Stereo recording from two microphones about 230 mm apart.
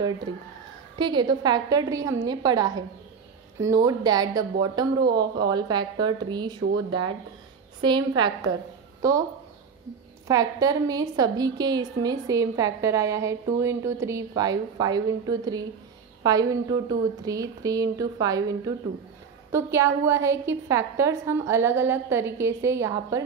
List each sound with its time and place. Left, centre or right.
0.9 s a woman's voice: centre
9.0 s a woman's voice: centre
10.2 s a woman's voice: centre